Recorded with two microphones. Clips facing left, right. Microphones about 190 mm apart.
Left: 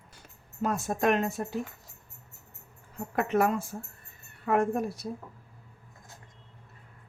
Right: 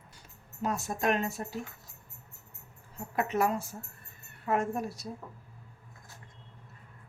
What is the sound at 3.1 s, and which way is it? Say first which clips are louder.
Speech: left 3 dB; 50° left (ahead or behind).